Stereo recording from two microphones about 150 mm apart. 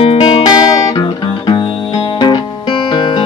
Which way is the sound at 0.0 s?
40° left (ahead or behind).